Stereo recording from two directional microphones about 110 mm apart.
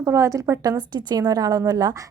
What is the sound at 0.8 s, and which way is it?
A woman's voice, 40° right (ahead or behind).